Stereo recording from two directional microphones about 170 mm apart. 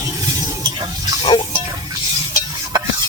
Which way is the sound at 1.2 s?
30° left (ahead or behind).